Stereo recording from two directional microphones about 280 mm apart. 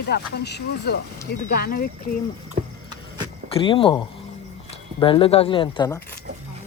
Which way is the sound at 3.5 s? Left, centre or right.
Centre.